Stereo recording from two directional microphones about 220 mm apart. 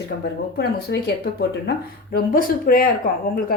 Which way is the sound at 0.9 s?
50° left (ahead or behind).